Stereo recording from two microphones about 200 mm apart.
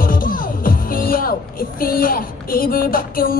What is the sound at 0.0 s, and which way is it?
Music, 45° left (ahead or behind).